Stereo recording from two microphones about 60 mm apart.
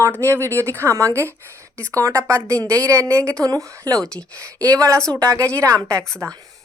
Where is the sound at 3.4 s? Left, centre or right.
Right.